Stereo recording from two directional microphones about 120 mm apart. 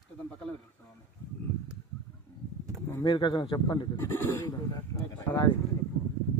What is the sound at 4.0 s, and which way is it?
Speech, 20° left (ahead or behind).